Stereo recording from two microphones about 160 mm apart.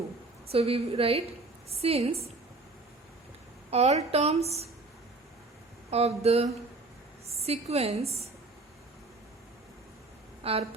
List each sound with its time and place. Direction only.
0.5 s a woman's voice: 40° right (ahead or behind)
3.7 s a woman's voice: 40° right (ahead or behind)
5.9 s a woman's voice: 40° right (ahead or behind)
10.4 s speech: 35° right (ahead or behind)